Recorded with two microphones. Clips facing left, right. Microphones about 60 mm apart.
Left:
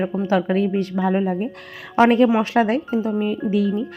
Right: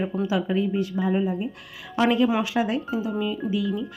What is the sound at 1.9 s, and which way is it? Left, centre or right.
Speech, left.